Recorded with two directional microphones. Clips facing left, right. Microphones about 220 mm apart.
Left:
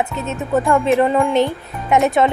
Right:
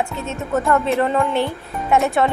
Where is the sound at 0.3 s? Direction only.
15° left (ahead or behind).